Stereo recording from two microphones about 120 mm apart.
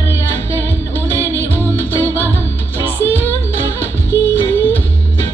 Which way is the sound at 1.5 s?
15° left (ahead or behind).